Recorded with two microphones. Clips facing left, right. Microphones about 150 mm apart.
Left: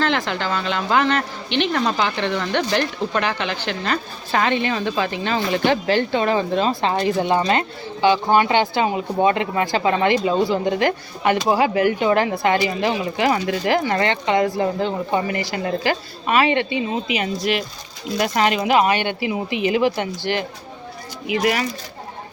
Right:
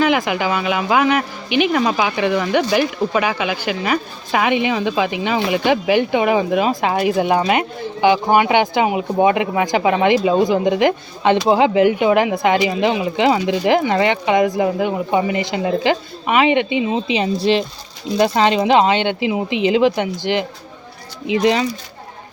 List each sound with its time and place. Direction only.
0.0 s a woman's voice: 10° right (ahead or behind)